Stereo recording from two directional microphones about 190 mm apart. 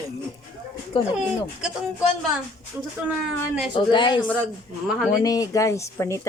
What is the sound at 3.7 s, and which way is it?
Speech, 25° left (ahead or behind).